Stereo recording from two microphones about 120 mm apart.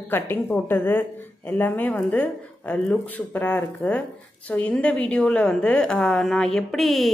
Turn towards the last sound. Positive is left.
turn(degrees=0)  # may be behind; listen again after turning